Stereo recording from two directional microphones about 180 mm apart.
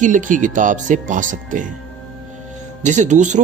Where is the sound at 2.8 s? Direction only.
40° right (ahead or behind).